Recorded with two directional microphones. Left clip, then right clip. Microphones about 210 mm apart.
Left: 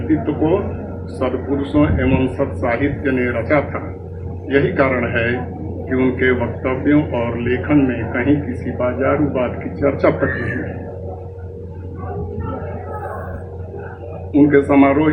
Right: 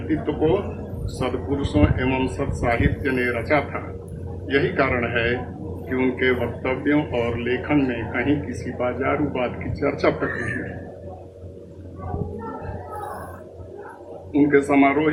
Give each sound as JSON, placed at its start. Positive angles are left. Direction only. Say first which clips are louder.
{"t": 0.3, "sound": "speech", "louder": "left 4 dB", "side_deg": 30}
{"t": 14.4, "sound": "speech", "louder": "left 5 dB", "side_deg": 30}